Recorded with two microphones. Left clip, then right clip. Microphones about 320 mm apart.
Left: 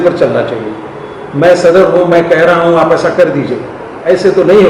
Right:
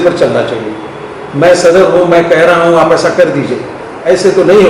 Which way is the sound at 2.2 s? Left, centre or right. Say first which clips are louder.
Right 1 dB; centre.